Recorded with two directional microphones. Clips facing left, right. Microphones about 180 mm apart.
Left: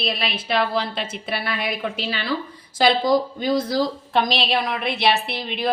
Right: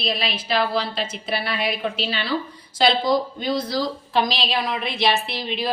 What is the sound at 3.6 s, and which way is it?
Speech, 55° left (ahead or behind).